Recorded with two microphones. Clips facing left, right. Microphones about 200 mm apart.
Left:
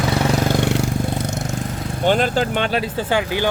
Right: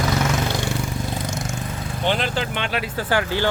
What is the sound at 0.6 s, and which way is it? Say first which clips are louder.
Vehicle: left 6 dB; 75° left (ahead or behind).